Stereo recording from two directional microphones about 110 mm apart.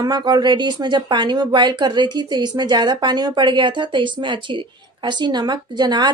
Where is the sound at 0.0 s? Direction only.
40° right (ahead or behind).